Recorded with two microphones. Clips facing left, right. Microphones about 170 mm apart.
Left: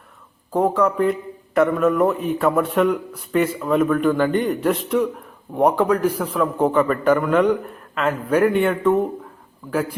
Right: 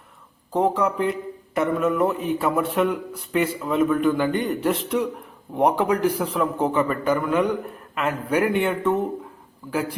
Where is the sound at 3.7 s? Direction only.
55° left (ahead or behind).